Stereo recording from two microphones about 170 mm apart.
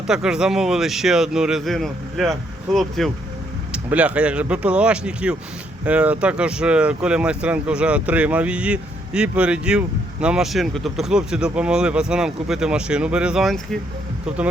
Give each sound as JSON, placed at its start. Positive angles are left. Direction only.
{"t": 0.1, "sound": "speech", "side_deg": -5}